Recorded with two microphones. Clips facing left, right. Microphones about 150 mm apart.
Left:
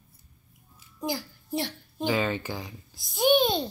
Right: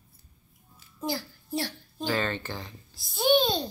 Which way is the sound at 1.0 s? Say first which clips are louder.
Even; 15° left (ahead or behind).